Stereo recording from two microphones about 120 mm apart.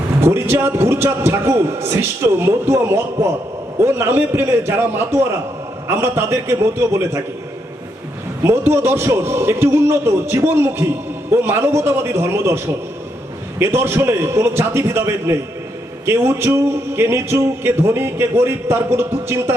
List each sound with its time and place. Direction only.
0.2 s a man's voice: 20° right (ahead or behind)
8.4 s a man's voice: 20° right (ahead or behind)